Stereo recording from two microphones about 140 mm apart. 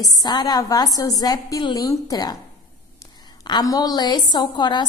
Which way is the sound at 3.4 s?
30° left (ahead or behind).